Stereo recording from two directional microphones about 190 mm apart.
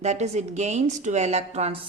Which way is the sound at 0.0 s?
35° right (ahead or behind).